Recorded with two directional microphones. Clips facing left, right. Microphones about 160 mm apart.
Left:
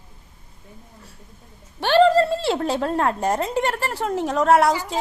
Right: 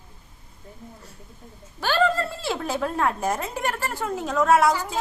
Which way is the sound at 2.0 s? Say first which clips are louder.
Left 9 dB; 30° left (ahead or behind).